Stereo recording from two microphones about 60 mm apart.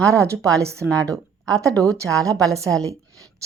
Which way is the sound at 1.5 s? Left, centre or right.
Right.